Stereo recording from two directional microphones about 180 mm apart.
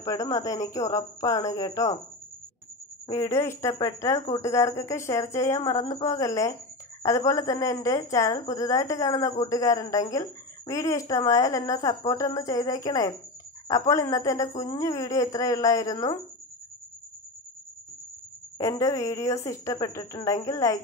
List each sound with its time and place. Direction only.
0.0 s speech: 20° left (ahead or behind)
3.1 s speech: 15° left (ahead or behind)
18.6 s speech: 20° left (ahead or behind)